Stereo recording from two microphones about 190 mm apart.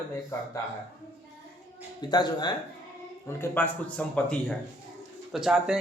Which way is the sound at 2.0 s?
20° left (ahead or behind).